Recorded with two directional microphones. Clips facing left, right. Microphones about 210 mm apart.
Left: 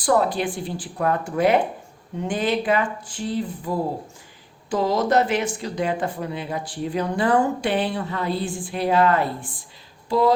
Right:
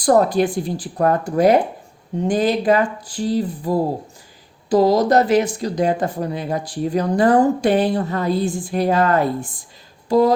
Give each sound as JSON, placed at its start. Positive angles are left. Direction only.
{"t": 0.0, "sound": "speech", "side_deg": -45}